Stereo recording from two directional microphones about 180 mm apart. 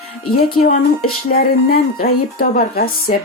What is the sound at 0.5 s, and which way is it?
Speech, 50° left (ahead or behind).